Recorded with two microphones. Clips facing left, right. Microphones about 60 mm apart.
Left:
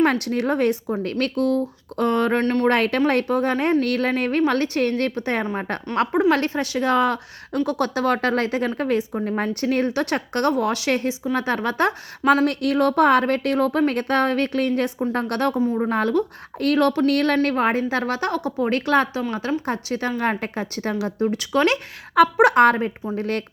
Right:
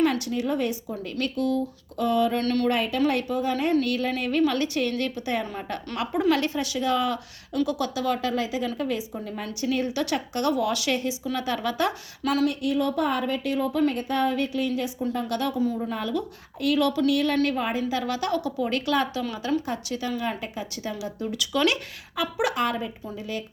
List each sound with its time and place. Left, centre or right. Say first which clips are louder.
0.0 s speech: left 4 dB; left
2.4 s a woman's voice: left 4 dB; left
2.6 s speech: left 5 dB; left
6.1 s a woman's voice: left 2 dB; left
12.5 s speech: left 5 dB; left
17.3 s a woman's voice: left 5 dB; left
22.1 s speech: left 12 dB; left